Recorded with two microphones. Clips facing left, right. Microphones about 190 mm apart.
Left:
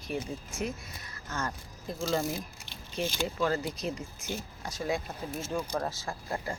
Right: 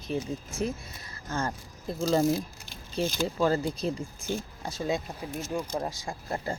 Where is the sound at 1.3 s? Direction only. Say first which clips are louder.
Right 4 dB; 30° right (ahead or behind).